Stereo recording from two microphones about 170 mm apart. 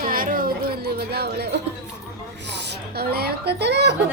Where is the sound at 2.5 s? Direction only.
85° right.